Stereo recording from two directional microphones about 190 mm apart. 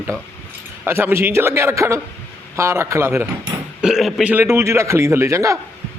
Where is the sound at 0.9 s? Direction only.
10° right (ahead or behind).